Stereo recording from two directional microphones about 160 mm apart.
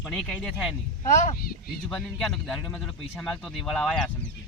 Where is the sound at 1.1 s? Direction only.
50° left (ahead or behind).